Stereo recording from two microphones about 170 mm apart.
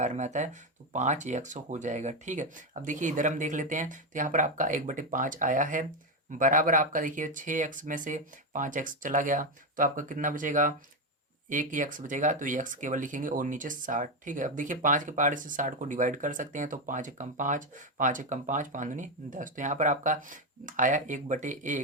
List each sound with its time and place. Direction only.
0.0 s speech: 45° right (ahead or behind)